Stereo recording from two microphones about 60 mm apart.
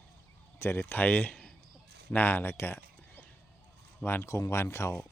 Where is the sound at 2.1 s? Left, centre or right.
Left.